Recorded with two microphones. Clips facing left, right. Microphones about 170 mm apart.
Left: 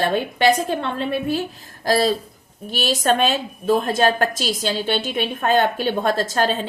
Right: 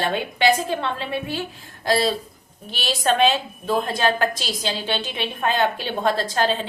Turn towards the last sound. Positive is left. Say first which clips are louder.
# left 2 dB
turn(degrees=45)  # may be behind; listen again after turning